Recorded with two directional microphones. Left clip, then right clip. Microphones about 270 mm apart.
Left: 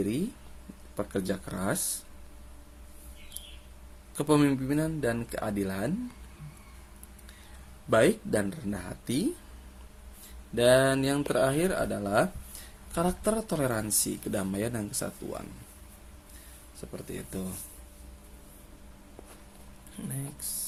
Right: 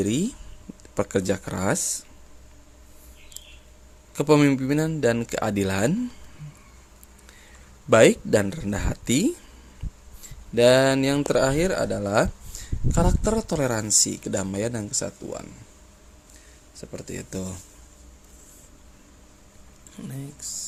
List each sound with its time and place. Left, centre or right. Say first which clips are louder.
0.9 s speech: right 8 dB; right
4.1 s speech: right 6 dB; centre
7.9 s speech: right 8 dB; right
10.5 s speech: right 5 dB; right
16.9 s speech: right 5 dB; centre
20.0 s speech: right 3 dB; centre